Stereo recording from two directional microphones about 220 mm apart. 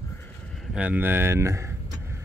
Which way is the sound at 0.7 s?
5° right (ahead or behind).